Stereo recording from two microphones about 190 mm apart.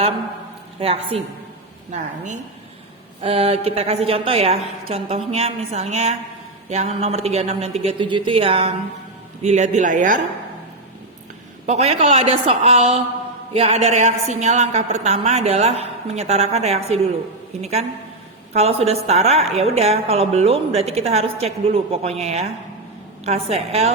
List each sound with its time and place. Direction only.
1.9 s a woman's voice: 40° right (ahead or behind)
11.6 s a woman's voice: 35° right (ahead or behind)